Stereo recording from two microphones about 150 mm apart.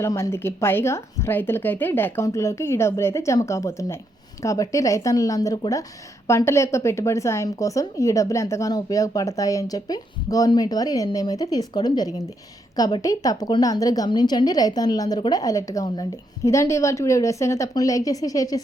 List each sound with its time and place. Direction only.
0.0 s a woman's voice: 20° left (ahead or behind)